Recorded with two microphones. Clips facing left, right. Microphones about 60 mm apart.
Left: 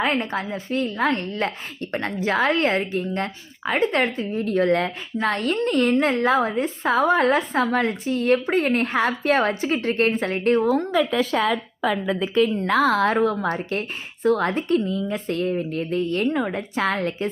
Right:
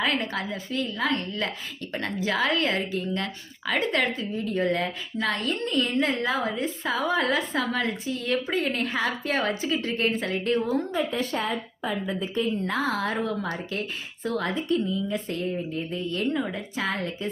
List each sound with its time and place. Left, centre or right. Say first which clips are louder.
0.0 s a woman's voice: left 4 dB; left
4.4 s a woman's voice: left 6 dB; left
11.5 s a woman's voice: left 6 dB; left
12.6 s a woman's voice: left 8 dB; left